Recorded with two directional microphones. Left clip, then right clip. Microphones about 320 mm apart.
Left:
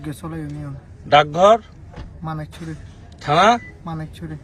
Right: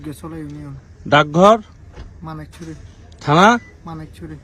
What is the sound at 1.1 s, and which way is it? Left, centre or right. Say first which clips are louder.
Speech: right 1 dB; centre.